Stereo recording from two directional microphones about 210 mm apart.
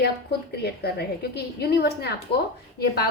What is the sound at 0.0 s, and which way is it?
A woman's voice, 50° left (ahead or behind).